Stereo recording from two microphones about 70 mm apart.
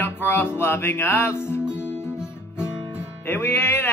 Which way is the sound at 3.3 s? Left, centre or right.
Left.